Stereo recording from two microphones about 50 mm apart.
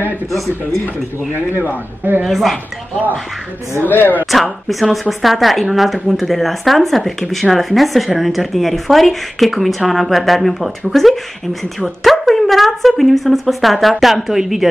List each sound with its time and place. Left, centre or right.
1.3 s speech: left
2.2 s speech: centre
3.8 s speech: left
4.3 s speech: centre